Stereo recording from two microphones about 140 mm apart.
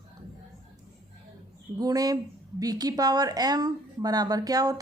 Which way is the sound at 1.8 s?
25° right (ahead or behind).